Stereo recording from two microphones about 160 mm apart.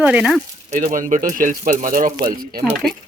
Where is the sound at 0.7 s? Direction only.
55° right (ahead or behind).